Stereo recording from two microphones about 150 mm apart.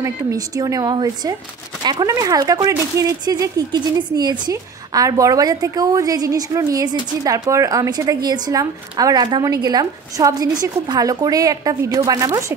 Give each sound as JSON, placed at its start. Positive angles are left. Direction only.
{"t": 0.0, "sound": "a woman's voice", "side_deg": -20}